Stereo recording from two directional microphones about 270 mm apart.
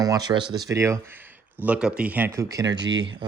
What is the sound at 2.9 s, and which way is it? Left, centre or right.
Speech, right.